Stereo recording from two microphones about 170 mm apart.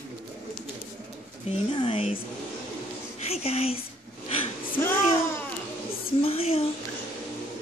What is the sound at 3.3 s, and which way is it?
Speech, 35° left (ahead or behind).